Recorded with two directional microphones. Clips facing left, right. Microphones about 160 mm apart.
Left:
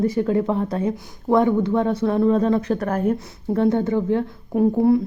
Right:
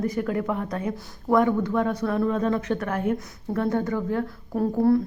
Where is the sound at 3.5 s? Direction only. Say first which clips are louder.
Left 6 dB; 25° left (ahead or behind).